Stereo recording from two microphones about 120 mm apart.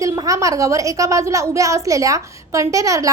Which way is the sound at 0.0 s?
25° right (ahead or behind).